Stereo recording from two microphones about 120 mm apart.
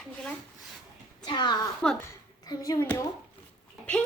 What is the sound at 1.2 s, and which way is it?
Speech, 40° left (ahead or behind).